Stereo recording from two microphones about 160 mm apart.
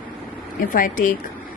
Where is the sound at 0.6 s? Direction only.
60° left (ahead or behind).